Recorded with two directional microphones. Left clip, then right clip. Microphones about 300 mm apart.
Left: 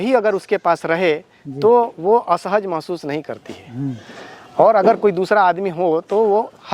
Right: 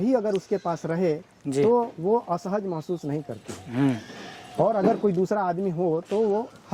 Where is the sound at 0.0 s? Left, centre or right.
Centre.